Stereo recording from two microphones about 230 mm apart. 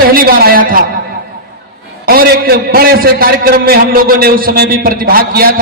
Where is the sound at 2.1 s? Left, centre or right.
Right.